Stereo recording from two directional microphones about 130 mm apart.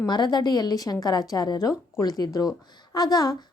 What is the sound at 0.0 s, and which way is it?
A woman's voice, 35° left (ahead or behind).